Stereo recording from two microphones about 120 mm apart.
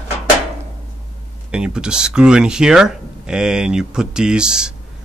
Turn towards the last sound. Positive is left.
turn(degrees=-5)  # may be behind; listen again after turning